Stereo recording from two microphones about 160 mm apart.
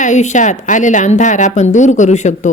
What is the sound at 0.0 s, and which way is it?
Speech, 50° left (ahead or behind).